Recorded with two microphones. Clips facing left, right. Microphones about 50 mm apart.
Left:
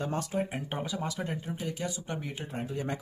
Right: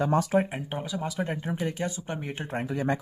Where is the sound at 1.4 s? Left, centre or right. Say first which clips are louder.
Right 5 dB; right.